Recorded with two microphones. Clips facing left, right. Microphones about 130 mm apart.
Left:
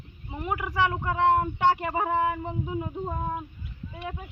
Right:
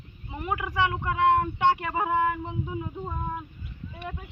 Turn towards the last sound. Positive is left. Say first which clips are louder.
# left 2 dB
turn(degrees=20)  # may be behind; listen again after turning